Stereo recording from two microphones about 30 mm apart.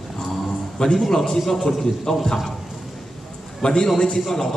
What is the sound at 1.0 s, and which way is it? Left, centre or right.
Speech, centre.